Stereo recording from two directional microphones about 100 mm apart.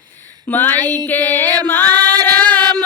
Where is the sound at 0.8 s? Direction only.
40° right (ahead or behind).